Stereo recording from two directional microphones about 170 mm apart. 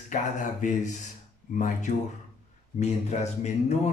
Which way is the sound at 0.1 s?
45° left (ahead or behind).